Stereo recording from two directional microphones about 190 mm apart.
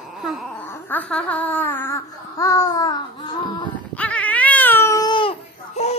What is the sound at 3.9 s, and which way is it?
Cat, 5° left (ahead or behind).